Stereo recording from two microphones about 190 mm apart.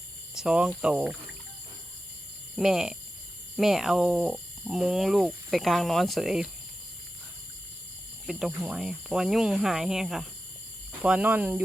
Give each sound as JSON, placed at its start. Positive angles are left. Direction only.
{"t": 0.3, "sound": "speech", "side_deg": -5}
{"t": 2.6, "sound": "speech", "side_deg": 0}
{"t": 8.3, "sound": "speech", "side_deg": 0}